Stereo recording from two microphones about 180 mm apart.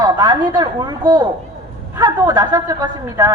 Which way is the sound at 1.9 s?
20° right (ahead or behind).